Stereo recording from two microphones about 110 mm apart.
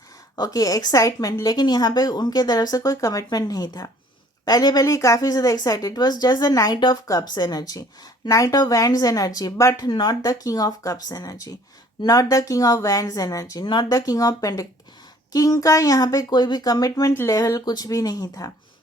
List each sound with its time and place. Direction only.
0.3 s speech: 35° left (ahead or behind)